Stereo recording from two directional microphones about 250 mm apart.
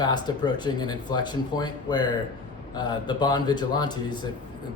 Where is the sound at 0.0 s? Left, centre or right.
Centre.